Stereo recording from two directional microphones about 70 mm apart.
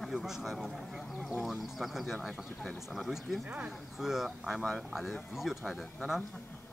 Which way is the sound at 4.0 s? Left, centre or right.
Centre.